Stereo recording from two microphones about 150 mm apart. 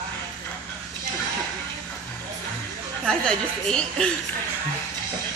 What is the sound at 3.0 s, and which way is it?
A woman's voice, 5° left (ahead or behind).